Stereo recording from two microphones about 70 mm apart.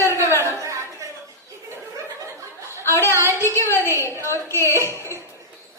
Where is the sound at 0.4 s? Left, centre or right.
Right.